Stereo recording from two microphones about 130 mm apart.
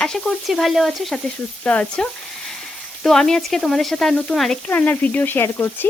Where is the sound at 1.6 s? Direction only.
10° left (ahead or behind).